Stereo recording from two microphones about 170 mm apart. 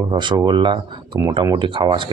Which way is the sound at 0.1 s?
25° right (ahead or behind).